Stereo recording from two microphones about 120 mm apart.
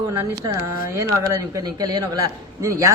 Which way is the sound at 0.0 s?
25° right (ahead or behind).